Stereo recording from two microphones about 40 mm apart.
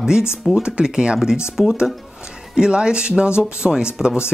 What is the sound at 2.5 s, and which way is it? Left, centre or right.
Speech, right.